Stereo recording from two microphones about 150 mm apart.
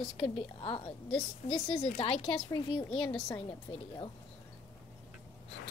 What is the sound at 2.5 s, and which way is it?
Speech, 30° left (ahead or behind).